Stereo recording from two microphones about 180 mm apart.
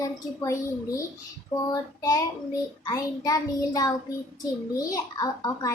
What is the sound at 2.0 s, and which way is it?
Child singing, 20° left (ahead or behind).